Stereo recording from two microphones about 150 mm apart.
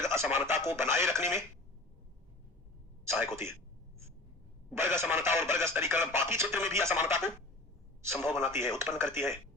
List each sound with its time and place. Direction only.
0.0 s speech: 15° right (ahead or behind)
3.0 s speech: 15° right (ahead or behind)
4.7 s speech: 15° right (ahead or behind)